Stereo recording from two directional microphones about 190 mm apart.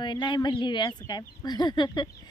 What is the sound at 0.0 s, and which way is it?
Speech, 25° left (ahead or behind).